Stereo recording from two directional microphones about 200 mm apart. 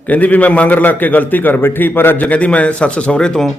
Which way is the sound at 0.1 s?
10° left (ahead or behind).